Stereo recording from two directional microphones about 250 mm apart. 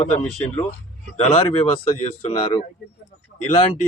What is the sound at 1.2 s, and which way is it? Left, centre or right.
Speech, left.